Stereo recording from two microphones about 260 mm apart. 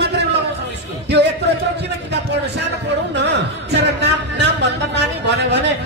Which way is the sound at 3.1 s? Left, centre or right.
Right.